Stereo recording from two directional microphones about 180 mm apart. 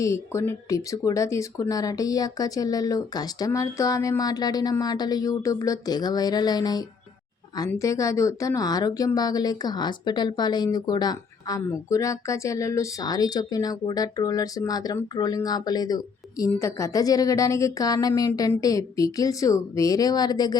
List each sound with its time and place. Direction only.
0.0 s speech: 15° left (ahead or behind)